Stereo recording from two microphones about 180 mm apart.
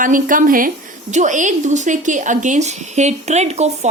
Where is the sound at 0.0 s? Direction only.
50° right (ahead or behind).